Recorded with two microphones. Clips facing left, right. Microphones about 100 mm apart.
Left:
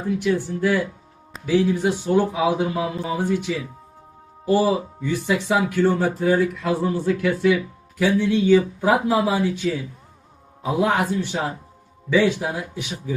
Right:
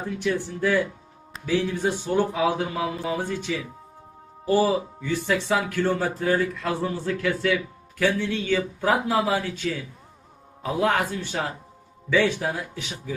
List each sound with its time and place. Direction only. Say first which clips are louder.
0.2 s speech: left 1 dB; 10° left (ahead or behind)